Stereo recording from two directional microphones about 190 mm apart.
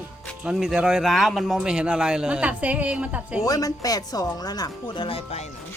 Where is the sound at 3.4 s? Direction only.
20° left (ahead or behind).